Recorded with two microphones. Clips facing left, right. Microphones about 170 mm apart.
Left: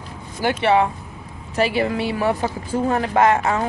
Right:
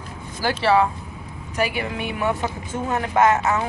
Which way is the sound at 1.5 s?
30° left (ahead or behind).